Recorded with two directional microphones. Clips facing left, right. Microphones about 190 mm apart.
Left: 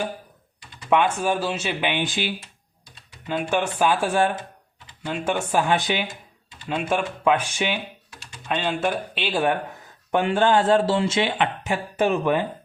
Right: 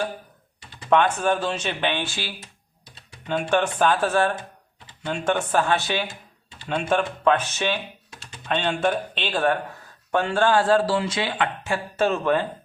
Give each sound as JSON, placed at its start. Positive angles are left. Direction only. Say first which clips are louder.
{"t": 0.9, "sound": "speech", "louder": "right 1 dB", "side_deg": 10}
{"t": 3.2, "sound": "speech", "louder": "right 2 dB", "side_deg": 5}
{"t": 5.0, "sound": "speech", "louder": "right 1 dB", "side_deg": 5}
{"t": 6.7, "sound": "speech", "louder": "right 1 dB", "side_deg": 5}